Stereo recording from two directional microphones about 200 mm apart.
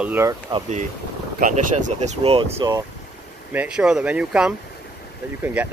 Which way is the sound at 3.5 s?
5° right (ahead or behind).